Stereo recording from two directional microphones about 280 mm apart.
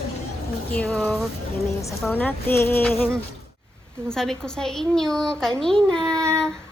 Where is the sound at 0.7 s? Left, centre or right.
Centre.